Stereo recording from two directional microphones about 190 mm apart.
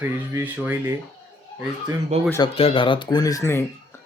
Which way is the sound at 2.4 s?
30° left (ahead or behind).